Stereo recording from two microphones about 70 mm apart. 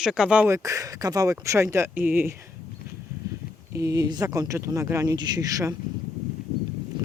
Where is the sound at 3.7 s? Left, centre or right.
Right.